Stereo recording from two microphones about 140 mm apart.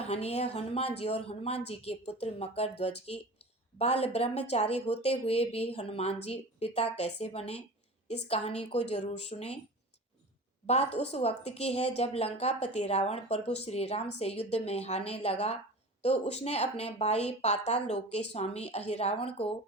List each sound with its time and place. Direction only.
0.0 s speech: 50° left (ahead or behind)
10.7 s speech: 50° left (ahead or behind)